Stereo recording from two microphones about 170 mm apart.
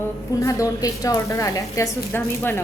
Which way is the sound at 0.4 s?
20° left (ahead or behind).